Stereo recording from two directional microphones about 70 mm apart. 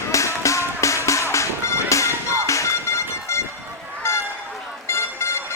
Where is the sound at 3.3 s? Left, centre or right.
Left.